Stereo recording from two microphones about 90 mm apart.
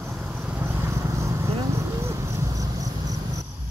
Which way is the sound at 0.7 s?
30° right (ahead or behind).